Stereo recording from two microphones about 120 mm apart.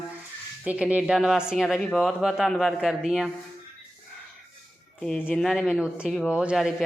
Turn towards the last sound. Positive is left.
turn(degrees=-5)  # may be behind; listen again after turning